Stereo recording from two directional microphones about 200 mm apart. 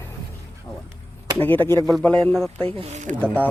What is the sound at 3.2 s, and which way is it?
Speech, 10° left (ahead or behind).